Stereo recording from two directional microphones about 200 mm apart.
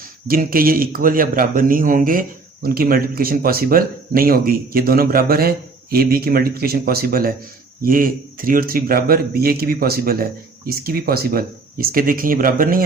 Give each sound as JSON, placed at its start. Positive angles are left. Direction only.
{"t": 0.3, "sound": "a man's voice", "side_deg": -45}